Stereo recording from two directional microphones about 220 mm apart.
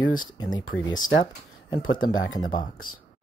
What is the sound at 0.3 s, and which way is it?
Speech, 20° left (ahead or behind).